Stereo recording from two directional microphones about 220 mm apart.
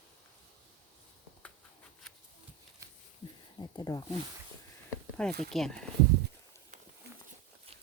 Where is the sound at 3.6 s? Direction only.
15° left (ahead or behind).